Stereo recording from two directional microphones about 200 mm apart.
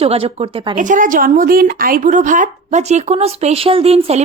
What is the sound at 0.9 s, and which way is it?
A woman's voice, 45° right (ahead or behind).